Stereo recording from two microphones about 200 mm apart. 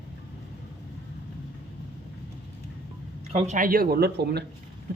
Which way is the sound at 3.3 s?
35° right (ahead or behind).